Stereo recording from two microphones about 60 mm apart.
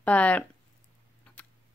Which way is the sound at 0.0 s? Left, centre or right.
Left.